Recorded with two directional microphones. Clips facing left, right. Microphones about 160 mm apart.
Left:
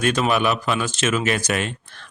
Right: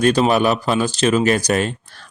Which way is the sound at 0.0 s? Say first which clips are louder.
Right 5 dB; 35° right (ahead or behind).